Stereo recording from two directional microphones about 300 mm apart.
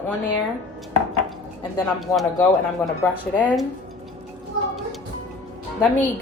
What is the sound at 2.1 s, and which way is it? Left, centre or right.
Speech, centre.